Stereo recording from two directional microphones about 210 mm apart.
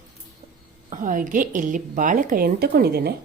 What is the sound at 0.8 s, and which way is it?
A woman's voice, 40° right (ahead or behind).